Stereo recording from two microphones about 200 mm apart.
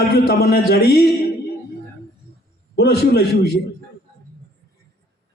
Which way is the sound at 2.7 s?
55° left (ahead or behind).